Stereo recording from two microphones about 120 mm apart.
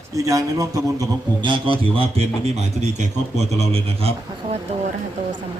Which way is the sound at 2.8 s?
70° right (ahead or behind).